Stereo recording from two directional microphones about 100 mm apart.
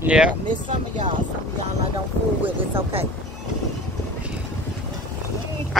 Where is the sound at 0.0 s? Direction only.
10° right (ahead or behind).